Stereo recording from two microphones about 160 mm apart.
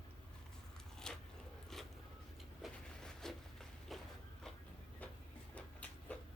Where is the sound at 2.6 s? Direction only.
5° left (ahead or behind).